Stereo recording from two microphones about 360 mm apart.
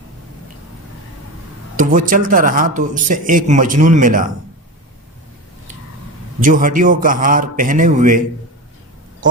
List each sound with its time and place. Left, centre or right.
1.7 s speech: right
6.4 s speech: right